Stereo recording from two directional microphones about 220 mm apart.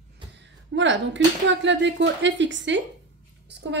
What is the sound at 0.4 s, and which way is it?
Speech, 55° right (ahead or behind).